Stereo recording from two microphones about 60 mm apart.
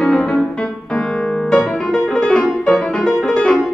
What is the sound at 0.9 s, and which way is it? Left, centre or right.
Piano, centre.